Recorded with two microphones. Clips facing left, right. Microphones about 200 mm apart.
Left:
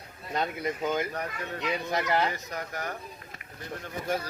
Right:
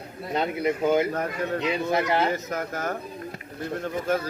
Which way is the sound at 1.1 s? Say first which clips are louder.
Right 8 dB; 45° right (ahead or behind).